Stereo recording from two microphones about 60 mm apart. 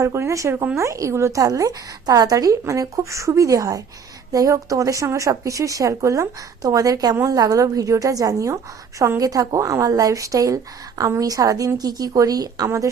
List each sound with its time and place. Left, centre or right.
0.0 s a woman's voice: right
9.0 s a woman's voice: right
12.6 s a woman's voice: right